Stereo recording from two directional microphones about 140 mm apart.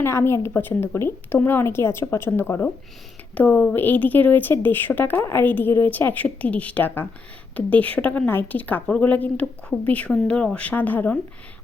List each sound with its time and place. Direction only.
0.0 s speech: 20° left (ahead or behind)